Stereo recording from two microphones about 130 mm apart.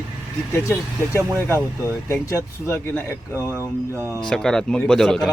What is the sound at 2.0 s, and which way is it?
A man's voice, 20° left (ahead or behind).